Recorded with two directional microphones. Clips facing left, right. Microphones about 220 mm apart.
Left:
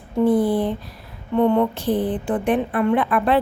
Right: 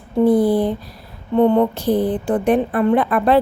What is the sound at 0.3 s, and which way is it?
A woman's voice, 40° right (ahead or behind).